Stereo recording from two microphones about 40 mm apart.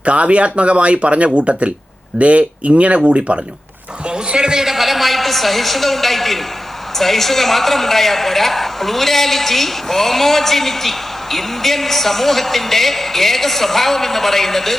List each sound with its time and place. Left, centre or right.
0.0 s a woman's voice: right; by 14.8 s centre